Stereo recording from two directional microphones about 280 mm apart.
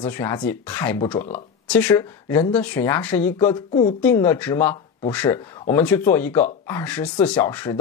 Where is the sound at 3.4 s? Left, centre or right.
Centre.